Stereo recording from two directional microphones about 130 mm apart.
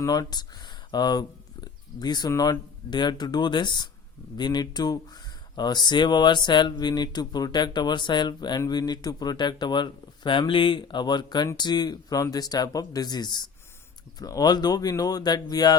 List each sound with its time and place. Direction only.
0.0 s speech: 30° left (ahead or behind)
1.6 s a sound: 30° left (ahead or behind)
2.3 s speech: 30° left (ahead or behind)